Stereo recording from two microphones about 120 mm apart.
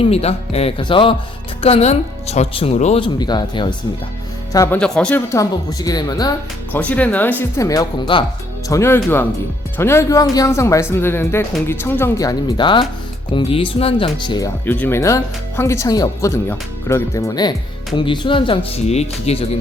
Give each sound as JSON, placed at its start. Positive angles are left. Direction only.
{"t": 0.0, "sound": "speech", "side_deg": 60}
{"t": 0.8, "sound": "speech", "side_deg": 45}
{"t": 1.6, "sound": "speech", "side_deg": 60}
{"t": 3.0, "sound": "speech", "side_deg": 35}
{"t": 4.7, "sound": "speech", "side_deg": 10}
{"t": 5.3, "sound": "speech", "side_deg": 30}
{"t": 6.7, "sound": "speech", "side_deg": 10}
{"t": 7.6, "sound": "speech", "side_deg": 30}
{"t": 8.7, "sound": "speech", "side_deg": 20}
{"t": 14.6, "sound": "speech", "side_deg": 15}
{"t": 17.9, "sound": "speech", "side_deg": 40}
{"t": 18.8, "sound": "speech", "side_deg": 65}